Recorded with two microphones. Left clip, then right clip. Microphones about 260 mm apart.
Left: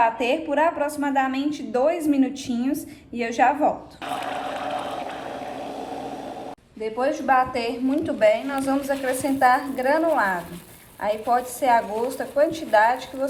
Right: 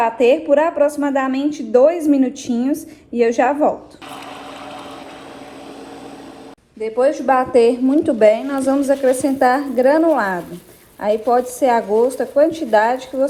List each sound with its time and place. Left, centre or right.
0.0 s a woman's voice: centre
7.0 s a woman's voice: centre